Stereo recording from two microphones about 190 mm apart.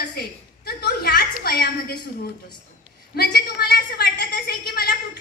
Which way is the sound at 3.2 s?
55° left (ahead or behind).